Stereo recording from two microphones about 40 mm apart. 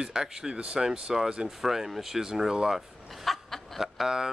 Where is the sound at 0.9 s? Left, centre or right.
Centre.